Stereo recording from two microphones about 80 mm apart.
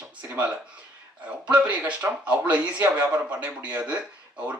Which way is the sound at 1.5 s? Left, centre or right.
Centre.